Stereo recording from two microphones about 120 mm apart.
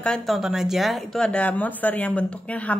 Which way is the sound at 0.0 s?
5° left (ahead or behind).